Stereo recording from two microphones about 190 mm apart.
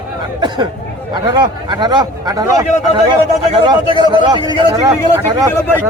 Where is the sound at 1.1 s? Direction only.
25° right (ahead or behind).